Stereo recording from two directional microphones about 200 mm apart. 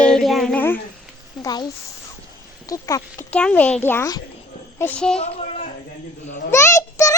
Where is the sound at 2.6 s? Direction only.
15° left (ahead or behind).